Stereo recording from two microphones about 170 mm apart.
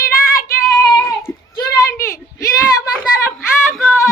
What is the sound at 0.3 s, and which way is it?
Child singing, 15° left (ahead or behind).